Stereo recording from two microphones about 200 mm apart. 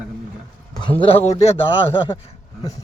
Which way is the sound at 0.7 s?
25° left (ahead or behind).